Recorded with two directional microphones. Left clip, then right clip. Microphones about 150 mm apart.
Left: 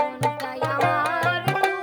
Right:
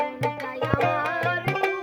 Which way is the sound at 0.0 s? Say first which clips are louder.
Left 3 dB; 50° right (ahead or behind).